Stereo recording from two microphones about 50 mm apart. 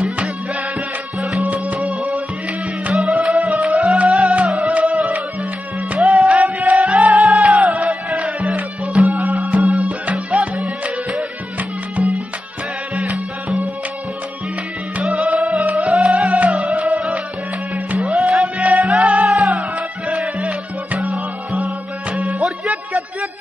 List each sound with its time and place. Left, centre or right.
1.4 s music: right
2.9 s music: right
3.7 s music: right
6.2 s music: right
7.2 s music: centre
7.6 s music: right
12.0 s music: right
15.8 s music: right
18.9 s music: centre